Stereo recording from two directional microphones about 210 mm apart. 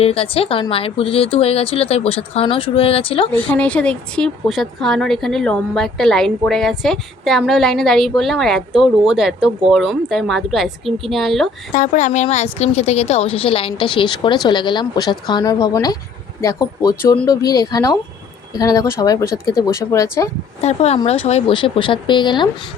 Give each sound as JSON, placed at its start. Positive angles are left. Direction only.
{"t": 0.0, "sound": "a woman's voice", "side_deg": 25}
{"t": 3.3, "sound": "speech", "side_deg": 5}
{"t": 11.7, "sound": "a woman's voice", "side_deg": 35}
{"t": 20.6, "sound": "a woman's voice", "side_deg": 30}